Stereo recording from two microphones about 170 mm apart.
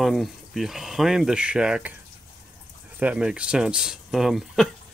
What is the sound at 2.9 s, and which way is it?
Speech, 5° right (ahead or behind).